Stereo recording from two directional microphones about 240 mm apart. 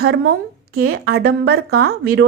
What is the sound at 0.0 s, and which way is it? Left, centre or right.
Speech, right.